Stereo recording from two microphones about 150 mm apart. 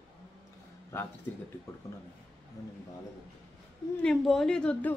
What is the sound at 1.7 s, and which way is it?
Speech, 20° left (ahead or behind).